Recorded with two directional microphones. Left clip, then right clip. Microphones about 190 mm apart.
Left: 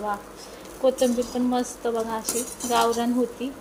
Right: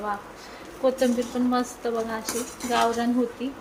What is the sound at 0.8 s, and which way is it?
Speech, centre (ahead or behind).